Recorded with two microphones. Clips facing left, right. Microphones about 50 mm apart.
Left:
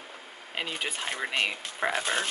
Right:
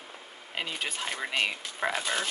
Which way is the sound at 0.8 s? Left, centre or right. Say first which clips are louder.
Left 1 dB; centre.